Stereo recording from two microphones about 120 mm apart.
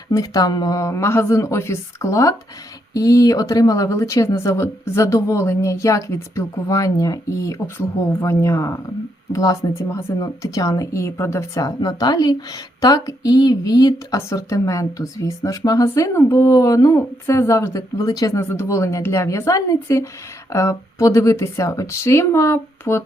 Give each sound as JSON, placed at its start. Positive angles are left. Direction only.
{"t": 0.1, "sound": "a woman's voice", "side_deg": 30}
{"t": 18.3, "sound": "a woman's voice", "side_deg": 20}